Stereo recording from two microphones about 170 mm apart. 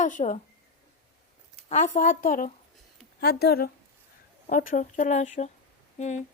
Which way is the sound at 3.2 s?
70° left (ahead or behind).